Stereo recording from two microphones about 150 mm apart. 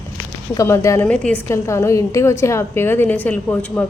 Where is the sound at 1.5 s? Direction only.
20° left (ahead or behind).